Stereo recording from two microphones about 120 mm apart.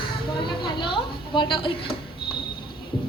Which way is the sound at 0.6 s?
45° left (ahead or behind).